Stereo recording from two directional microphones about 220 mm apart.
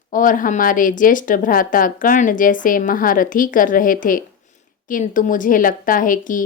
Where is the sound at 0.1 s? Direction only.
35° left (ahead or behind).